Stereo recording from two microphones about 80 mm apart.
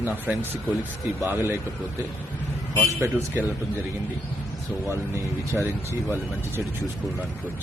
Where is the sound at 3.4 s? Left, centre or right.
Right.